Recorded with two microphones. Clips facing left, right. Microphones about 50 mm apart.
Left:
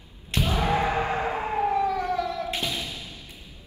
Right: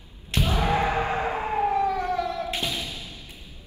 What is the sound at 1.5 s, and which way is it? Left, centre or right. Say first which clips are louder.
Siren: right 1 dB; right.